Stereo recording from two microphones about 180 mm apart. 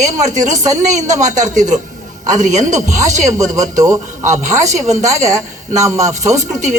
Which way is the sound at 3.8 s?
20° right (ahead or behind).